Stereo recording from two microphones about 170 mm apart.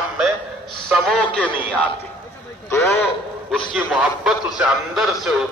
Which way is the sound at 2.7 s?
15° left (ahead or behind).